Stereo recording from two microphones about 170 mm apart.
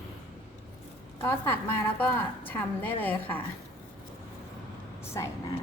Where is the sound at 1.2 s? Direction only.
15° left (ahead or behind).